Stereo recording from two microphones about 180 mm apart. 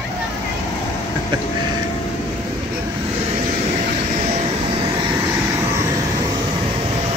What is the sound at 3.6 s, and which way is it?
Vehicle, 40° right (ahead or behind).